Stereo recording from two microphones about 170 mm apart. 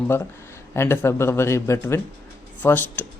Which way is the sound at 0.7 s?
15° left (ahead or behind).